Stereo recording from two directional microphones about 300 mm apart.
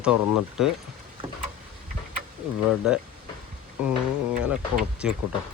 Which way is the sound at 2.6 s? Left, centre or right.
Centre.